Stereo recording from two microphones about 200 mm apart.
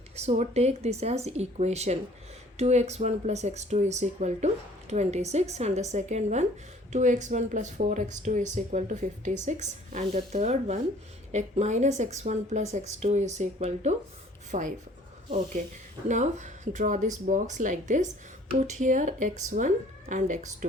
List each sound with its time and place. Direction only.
0.2 s speech: 30° right (ahead or behind)